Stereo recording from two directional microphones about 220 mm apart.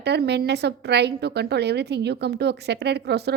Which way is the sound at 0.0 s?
50° right (ahead or behind).